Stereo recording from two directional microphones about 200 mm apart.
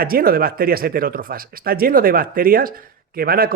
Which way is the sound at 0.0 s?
45° right (ahead or behind).